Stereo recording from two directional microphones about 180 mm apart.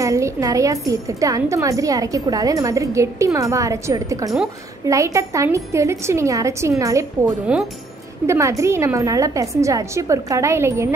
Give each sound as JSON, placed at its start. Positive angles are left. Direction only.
{"t": 0.0, "sound": "a woman's voice", "side_deg": -15}